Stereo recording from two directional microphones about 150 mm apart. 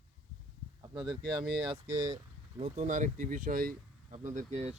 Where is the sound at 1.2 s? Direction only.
30° right (ahead or behind).